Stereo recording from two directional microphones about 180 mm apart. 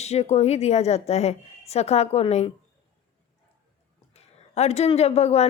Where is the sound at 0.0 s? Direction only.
35° left (ahead or behind).